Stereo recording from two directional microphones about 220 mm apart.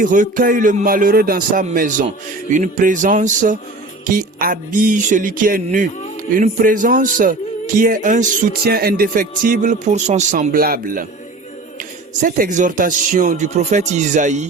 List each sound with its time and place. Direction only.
0.0 s speech: 35° right (ahead or behind)
12.2 s speech: 35° right (ahead or behind)